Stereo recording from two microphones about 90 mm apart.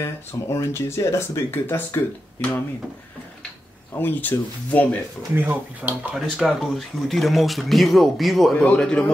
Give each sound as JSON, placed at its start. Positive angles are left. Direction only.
{"t": 0.0, "sound": "speech", "side_deg": 30}
{"t": 3.9, "sound": "speech", "side_deg": 20}
{"t": 5.3, "sound": "speech", "side_deg": -20}
{"t": 6.1, "sound": "speech", "side_deg": 0}
{"t": 8.5, "sound": "speech", "side_deg": 10}